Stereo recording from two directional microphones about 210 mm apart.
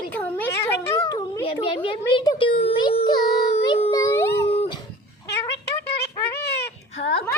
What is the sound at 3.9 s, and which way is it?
Music, 15° left (ahead or behind).